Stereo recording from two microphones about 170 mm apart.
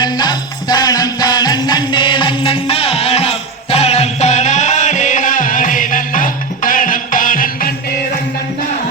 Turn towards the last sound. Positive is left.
turn(degrees=55)  # may be behind; listen again after turning